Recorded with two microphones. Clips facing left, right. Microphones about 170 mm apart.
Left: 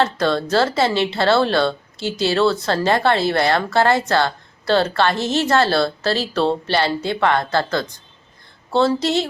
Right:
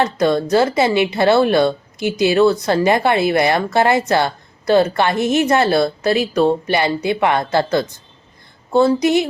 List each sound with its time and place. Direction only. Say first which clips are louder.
0.0 s a woman's voice: right 3 dB; 15° right (ahead or behind)